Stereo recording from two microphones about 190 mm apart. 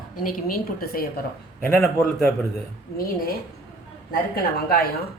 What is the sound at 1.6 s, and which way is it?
Speech, 5° left (ahead or behind).